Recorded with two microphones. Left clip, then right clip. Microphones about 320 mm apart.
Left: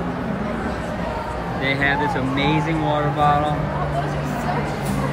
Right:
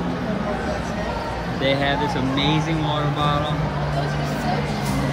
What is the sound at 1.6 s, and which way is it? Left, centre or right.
Speech, centre.